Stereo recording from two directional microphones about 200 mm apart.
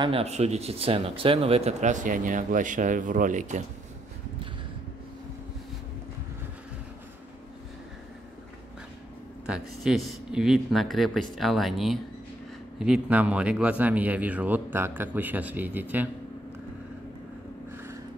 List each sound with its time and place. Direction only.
0.0 s speech: 30° right (ahead or behind)
9.5 s speech: centre (ahead or behind)